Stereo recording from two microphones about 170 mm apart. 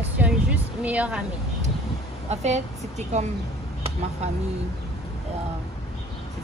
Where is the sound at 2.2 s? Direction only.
40° right (ahead or behind).